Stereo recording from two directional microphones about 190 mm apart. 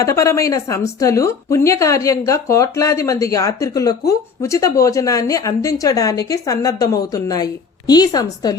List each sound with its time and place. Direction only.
0.0 s a woman's voice: 15° left (ahead or behind)